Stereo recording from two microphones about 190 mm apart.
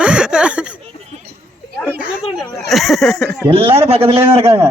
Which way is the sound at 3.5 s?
30° right (ahead or behind).